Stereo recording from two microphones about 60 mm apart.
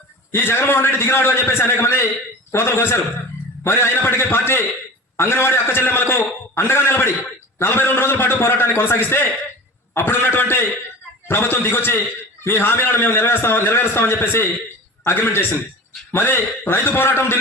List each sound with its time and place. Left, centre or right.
0.3 s a man's voice: left